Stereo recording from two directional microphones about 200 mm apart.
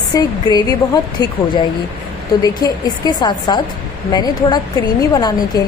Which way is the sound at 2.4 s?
20° left (ahead or behind).